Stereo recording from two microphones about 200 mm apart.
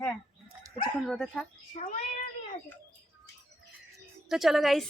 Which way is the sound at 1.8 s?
35° left (ahead or behind).